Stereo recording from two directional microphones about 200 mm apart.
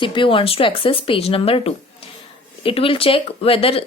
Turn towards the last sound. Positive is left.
turn(degrees=30)  # may be behind; listen again after turning